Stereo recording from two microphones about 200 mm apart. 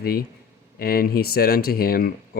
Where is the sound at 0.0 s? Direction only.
50° left (ahead or behind).